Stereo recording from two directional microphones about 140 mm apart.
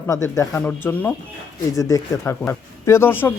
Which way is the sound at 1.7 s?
25° left (ahead or behind).